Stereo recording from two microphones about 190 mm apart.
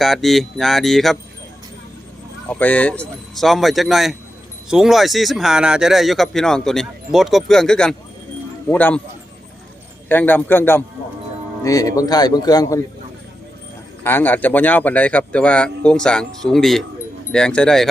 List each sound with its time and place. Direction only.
0.0 s speech: centre (ahead or behind)
2.5 s speech: 10° left (ahead or behind)
10.1 s speech: 10° left (ahead or behind)
14.0 s speech: 10° left (ahead or behind)